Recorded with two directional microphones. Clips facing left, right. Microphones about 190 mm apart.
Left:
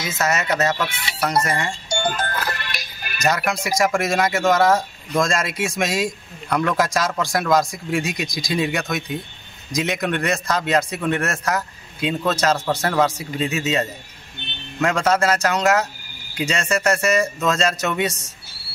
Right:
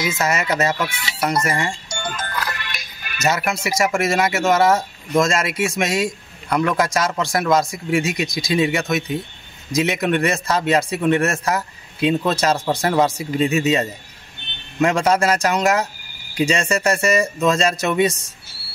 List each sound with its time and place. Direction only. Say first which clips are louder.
0.0 s a man's voice: right 2 dB; 10° right (ahead or behind)
1.9 s music: left 5 dB; 35° left (ahead or behind)
3.3 s a man's voice: even; 5° right (ahead or behind)